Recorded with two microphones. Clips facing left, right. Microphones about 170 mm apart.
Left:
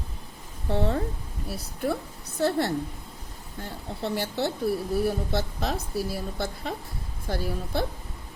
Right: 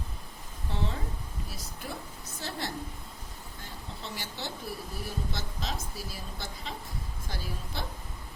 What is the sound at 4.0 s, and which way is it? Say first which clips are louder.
A woman's voice: left 14 dB; 60° left (ahead or behind).